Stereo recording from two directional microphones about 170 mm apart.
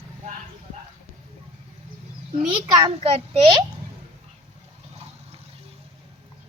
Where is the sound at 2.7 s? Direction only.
30° right (ahead or behind).